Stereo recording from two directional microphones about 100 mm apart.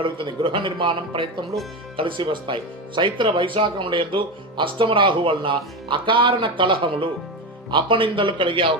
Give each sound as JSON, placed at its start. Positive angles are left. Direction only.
{"t": 0.0, "sound": "speech", "side_deg": -55}